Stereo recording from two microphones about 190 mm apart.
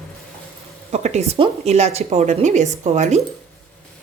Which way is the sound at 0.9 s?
35° right (ahead or behind).